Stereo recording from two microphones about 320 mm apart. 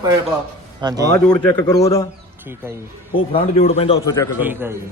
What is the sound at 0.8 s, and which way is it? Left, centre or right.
Speech, centre.